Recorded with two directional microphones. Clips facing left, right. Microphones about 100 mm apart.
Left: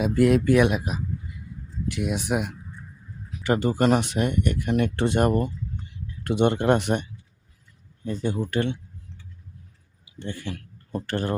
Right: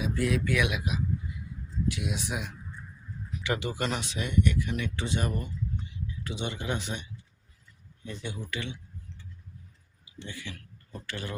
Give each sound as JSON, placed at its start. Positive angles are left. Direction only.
{"t": 0.0, "sound": "speech", "side_deg": 55}
{"t": 0.4, "sound": "speech", "side_deg": 40}
{"t": 3.4, "sound": "speech", "side_deg": 40}
{"t": 8.0, "sound": "speech", "side_deg": 40}
{"t": 10.2, "sound": "speech", "side_deg": 50}